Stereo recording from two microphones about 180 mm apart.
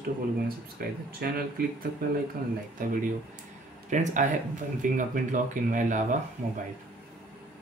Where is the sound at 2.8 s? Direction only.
50° right (ahead or behind).